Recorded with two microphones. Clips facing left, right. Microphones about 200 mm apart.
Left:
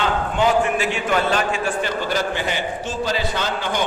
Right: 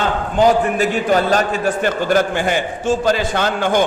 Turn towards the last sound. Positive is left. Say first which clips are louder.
# right 7 dB
turn(degrees=-50)  # may be behind; listen again after turning